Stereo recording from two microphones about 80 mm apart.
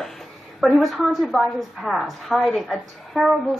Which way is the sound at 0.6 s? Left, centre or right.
Centre.